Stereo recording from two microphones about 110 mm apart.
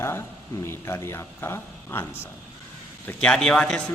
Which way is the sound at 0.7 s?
25° left (ahead or behind).